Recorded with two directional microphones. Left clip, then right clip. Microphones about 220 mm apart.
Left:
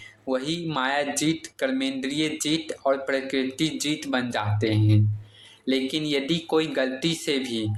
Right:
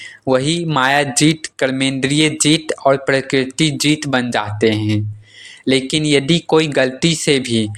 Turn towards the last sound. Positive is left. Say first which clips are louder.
# right 11 dB
turn(degrees=-40)  # may be behind; listen again after turning